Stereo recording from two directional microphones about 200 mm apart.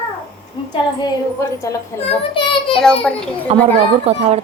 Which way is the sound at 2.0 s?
25° left (ahead or behind).